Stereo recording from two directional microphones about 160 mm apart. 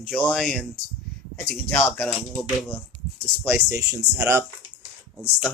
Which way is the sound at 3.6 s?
20° right (ahead or behind).